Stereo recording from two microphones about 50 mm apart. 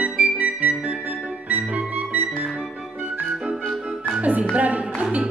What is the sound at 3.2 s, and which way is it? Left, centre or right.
Music, centre.